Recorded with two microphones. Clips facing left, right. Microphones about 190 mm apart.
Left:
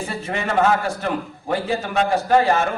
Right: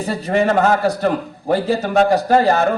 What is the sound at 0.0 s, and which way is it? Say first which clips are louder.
A man's voice: right 9 dB; 40° right (ahead or behind).